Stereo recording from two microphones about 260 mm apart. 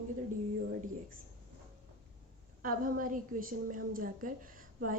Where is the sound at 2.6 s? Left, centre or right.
Right.